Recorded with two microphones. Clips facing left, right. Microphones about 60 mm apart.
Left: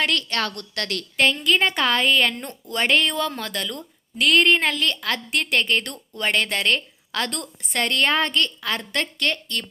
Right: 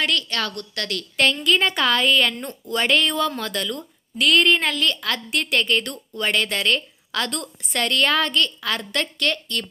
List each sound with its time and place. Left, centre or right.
0.0 s a woman's voice: left
1.1 s a woman's voice: left
2.4 s speech: centre
2.7 s a woman's voice: left